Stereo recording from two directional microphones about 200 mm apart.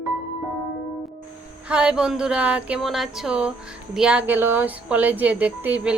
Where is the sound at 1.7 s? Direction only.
5° right (ahead or behind).